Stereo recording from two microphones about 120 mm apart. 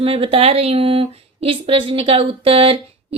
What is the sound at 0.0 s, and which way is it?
Speech, 50° right (ahead or behind).